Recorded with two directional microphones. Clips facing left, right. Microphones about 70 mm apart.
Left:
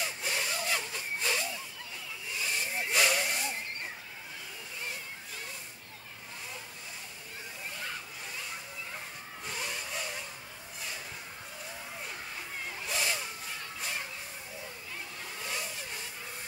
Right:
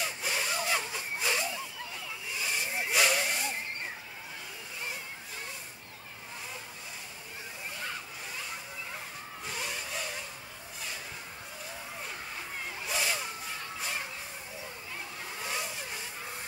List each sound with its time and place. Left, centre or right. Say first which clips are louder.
0.0 s sawing: right 1 dB; centre
0.6 s a sound: right 2 dB; centre
9.4 s vehicle: even; centre
12.6 s a sound: right 1 dB; centre
13.7 s music: right 1 dB; centre
15.3 s vehicle: right 2 dB; centre